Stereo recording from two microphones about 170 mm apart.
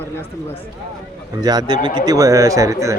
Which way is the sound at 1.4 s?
25° right (ahead or behind).